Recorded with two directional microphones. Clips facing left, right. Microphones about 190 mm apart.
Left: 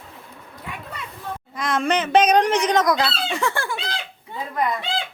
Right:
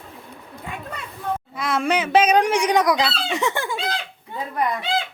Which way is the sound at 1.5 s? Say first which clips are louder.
Left 1 dB; 5° right (ahead or behind).